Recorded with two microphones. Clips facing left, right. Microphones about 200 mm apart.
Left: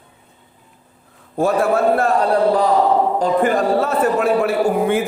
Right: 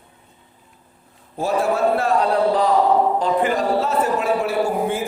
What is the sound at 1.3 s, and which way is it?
A man's voice, 55° left (ahead or behind).